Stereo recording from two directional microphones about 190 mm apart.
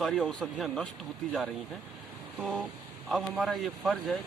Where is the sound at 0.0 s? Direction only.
Centre (ahead or behind).